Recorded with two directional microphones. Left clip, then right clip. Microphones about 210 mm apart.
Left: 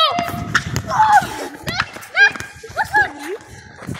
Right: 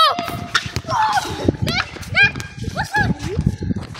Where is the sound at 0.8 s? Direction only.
25° right (ahead or behind).